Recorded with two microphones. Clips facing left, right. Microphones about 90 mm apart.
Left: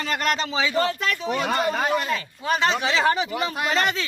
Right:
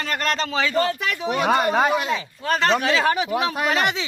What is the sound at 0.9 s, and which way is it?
Speech, 15° right (ahead or behind).